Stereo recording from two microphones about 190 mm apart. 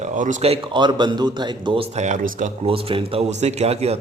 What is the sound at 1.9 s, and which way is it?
A man's voice, 40° right (ahead or behind).